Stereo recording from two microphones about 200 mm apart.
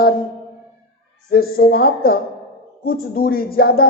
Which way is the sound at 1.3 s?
50° left (ahead or behind).